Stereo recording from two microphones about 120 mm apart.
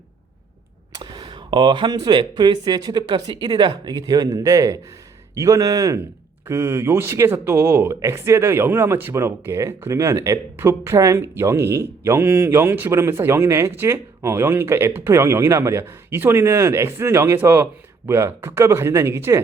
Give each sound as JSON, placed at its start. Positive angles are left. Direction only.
{"t": 0.9, "sound": "speech", "side_deg": -40}